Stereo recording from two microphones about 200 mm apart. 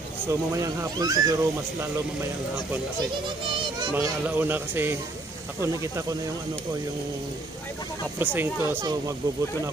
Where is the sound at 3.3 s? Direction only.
25° right (ahead or behind).